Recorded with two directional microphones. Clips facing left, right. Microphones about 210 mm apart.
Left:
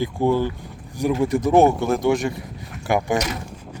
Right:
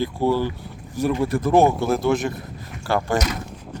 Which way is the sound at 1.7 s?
Centre (ahead or behind).